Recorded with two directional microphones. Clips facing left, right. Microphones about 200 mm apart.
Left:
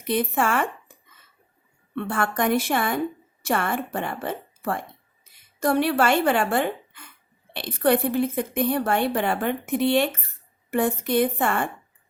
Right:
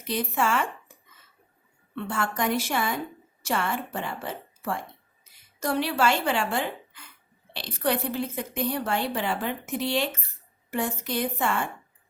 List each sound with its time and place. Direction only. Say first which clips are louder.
0.0 s a woman's voice: left 4 dB; 55° left (ahead or behind)
2.0 s a woman's voice: left 4 dB; 55° left (ahead or behind)